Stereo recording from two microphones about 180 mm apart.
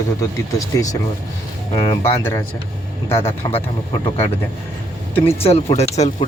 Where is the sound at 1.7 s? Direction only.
20° left (ahead or behind).